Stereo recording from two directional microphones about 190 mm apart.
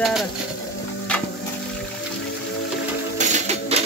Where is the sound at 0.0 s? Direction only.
Centre (ahead or behind).